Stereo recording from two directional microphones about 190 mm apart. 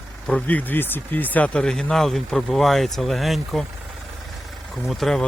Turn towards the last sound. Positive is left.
turn(degrees=0)  # may be behind; listen again after turning